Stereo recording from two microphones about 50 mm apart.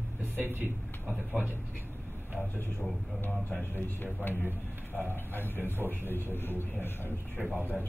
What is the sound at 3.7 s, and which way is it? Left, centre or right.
A man's voice, left.